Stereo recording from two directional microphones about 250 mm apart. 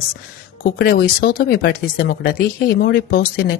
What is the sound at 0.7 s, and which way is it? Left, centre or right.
Speech, left.